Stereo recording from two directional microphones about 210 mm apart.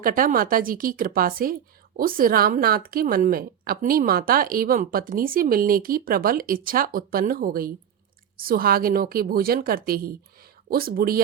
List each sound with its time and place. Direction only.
0.0 s a woman's voice: 40° right (ahead or behind)